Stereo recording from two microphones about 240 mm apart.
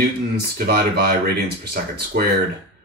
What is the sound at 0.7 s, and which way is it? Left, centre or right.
Speech, right.